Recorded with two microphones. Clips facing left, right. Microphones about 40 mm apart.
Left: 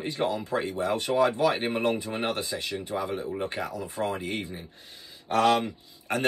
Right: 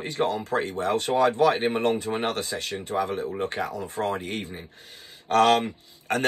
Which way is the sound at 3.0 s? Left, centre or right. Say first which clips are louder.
Right 3 dB; right.